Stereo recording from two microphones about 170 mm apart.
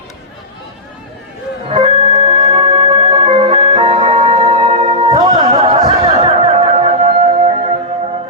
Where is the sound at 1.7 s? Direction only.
35° right (ahead or behind).